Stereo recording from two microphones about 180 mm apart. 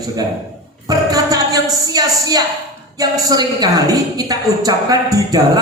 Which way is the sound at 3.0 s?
20° right (ahead or behind).